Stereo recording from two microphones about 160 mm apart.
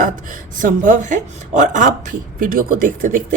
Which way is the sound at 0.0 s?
55° right (ahead or behind).